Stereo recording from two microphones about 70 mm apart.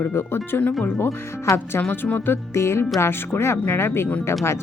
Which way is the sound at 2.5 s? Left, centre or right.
Left.